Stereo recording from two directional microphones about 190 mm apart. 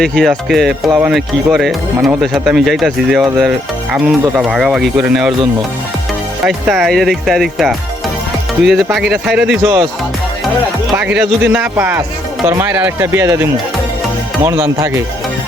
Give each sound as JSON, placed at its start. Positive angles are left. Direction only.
{"t": 0.0, "sound": "speech", "side_deg": 0}
{"t": 6.4, "sound": "speech", "side_deg": 0}
{"t": 9.6, "sound": "speech", "side_deg": -20}
{"t": 10.9, "sound": "speech", "side_deg": -5}